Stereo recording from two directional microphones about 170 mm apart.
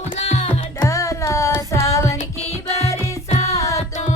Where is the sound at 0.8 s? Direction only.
20° left (ahead or behind).